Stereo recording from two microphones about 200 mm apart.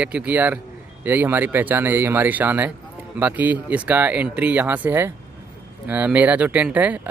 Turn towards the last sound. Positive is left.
turn(degrees=-5)  # may be behind; listen again after turning